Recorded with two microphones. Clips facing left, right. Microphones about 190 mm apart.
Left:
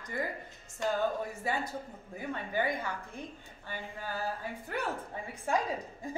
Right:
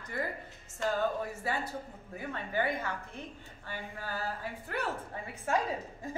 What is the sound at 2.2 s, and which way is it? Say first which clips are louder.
Speech: even; 15° left (ahead or behind).